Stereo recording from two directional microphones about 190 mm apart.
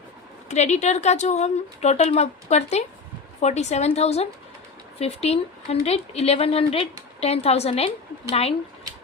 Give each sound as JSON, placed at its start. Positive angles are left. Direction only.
{"t": 0.4, "sound": "a woman's voice", "side_deg": 35}